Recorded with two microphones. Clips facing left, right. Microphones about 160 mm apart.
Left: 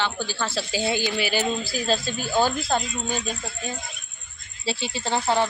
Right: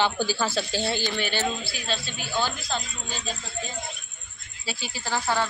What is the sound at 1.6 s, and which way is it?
Speech, 40° left (ahead or behind).